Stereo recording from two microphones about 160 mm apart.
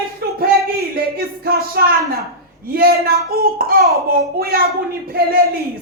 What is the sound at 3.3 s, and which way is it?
A woman's voice, 75° right (ahead or behind).